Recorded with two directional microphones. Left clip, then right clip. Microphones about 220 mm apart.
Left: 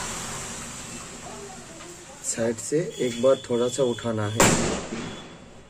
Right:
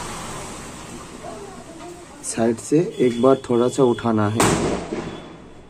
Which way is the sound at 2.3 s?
30° right (ahead or behind).